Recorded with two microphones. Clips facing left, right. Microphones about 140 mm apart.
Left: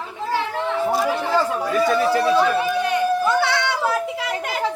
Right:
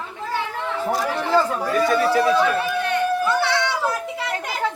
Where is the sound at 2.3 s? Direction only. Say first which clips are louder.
Left 2 dB; 15° left (ahead or behind).